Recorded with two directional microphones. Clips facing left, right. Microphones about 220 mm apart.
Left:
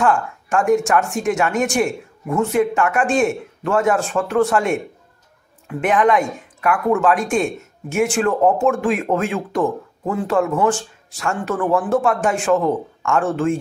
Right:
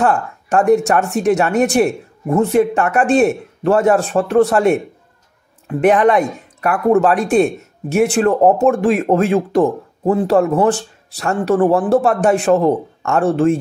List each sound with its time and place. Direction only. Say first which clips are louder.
0.0 s speech: right 2 dB; 35° right (ahead or behind)